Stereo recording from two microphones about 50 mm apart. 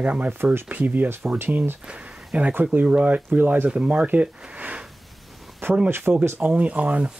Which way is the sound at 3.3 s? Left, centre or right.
Right.